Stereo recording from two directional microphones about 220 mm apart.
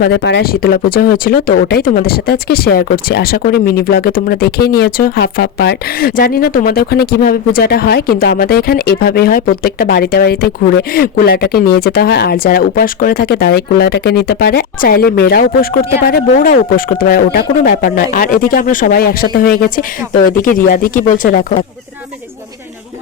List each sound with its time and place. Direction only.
0.0 s speech: 50° left (ahead or behind)